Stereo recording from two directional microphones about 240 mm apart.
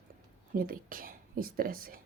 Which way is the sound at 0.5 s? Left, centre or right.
Right.